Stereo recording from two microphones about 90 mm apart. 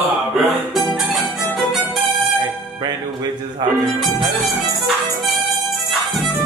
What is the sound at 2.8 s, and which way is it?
Music, 50° right (ahead or behind).